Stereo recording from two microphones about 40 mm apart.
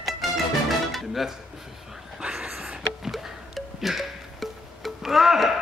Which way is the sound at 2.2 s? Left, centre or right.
Centre.